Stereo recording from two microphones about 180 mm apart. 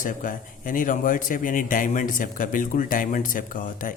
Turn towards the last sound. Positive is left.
turn(degrees=45)  # may be behind; listen again after turning